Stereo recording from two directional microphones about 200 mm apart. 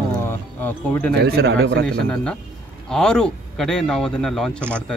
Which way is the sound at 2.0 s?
5° left (ahead or behind).